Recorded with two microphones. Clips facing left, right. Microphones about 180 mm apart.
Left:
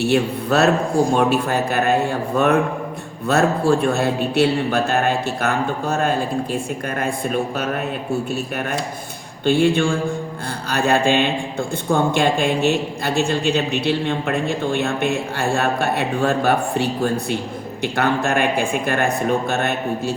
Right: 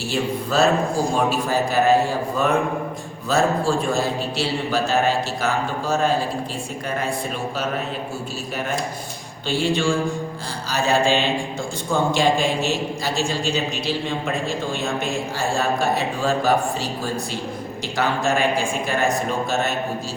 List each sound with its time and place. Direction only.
0.0 s a man's voice: 65° left (ahead or behind)
9.5 s a man's voice: 55° left (ahead or behind)